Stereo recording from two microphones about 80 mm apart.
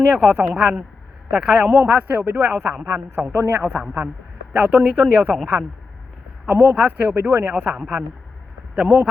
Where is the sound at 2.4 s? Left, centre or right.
Centre.